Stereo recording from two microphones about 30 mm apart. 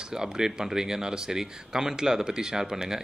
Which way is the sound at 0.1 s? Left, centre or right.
Right.